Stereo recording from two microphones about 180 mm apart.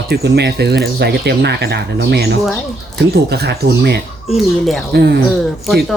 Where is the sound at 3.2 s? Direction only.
65° right (ahead or behind).